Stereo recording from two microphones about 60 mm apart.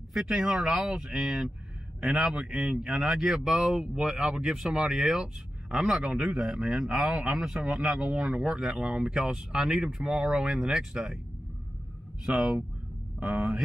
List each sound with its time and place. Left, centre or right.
0.1 s speech: centre
8.8 s speech: centre
12.3 s speech: centre